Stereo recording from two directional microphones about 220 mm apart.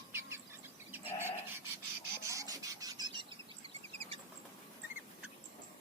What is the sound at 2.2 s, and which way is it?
Rub, 15° right (ahead or behind).